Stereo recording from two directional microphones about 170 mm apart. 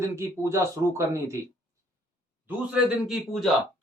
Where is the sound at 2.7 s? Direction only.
5° right (ahead or behind).